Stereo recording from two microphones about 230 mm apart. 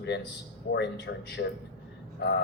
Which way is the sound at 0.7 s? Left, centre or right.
Left.